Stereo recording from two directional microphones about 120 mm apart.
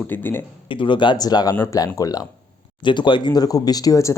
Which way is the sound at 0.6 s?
45° left (ahead or behind).